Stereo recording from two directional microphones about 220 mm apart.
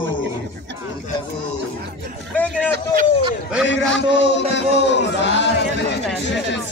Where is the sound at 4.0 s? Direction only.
55° left (ahead or behind).